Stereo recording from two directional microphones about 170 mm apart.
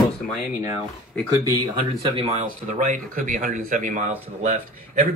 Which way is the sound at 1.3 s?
30° right (ahead or behind).